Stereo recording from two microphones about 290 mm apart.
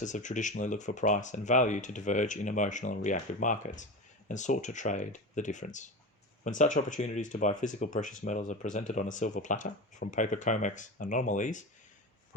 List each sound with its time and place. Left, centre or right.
0.0 s speech: left